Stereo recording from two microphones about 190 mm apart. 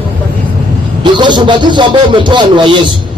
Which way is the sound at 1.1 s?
25° right (ahead or behind).